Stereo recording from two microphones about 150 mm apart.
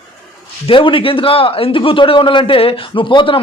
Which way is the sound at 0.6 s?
35° left (ahead or behind).